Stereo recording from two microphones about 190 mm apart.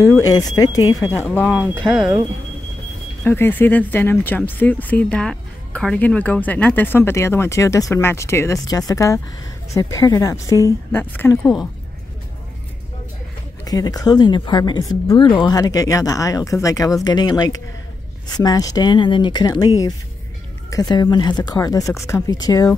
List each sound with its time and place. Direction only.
0.0 s speech: 15° left (ahead or behind)
1.4 s speech: 5° right (ahead or behind)
3.3 s speech: 10° left (ahead or behind)
13.7 s speech: 20° left (ahead or behind)